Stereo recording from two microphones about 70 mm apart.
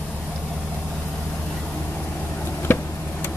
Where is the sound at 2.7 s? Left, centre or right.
Left.